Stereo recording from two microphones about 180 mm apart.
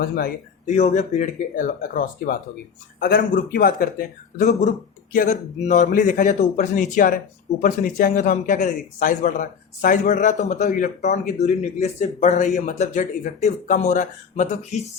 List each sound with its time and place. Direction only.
0.7 s a man's voice: 40° left (ahead or behind)